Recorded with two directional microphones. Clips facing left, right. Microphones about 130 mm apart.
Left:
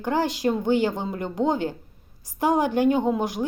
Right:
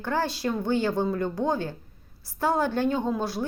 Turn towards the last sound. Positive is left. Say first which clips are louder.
# left 4 dB
turn(degrees=15)  # may be behind; listen again after turning